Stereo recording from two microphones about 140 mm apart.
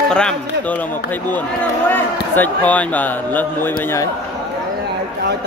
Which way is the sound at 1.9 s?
15° left (ahead or behind).